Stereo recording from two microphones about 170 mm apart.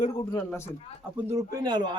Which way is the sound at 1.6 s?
25° right (ahead or behind).